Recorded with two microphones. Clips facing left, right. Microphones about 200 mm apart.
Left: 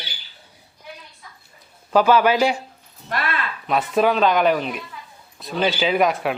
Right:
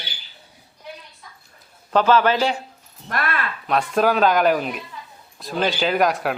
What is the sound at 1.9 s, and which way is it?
Speech, 10° left (ahead or behind).